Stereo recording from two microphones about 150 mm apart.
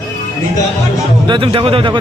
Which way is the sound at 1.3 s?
35° right (ahead or behind).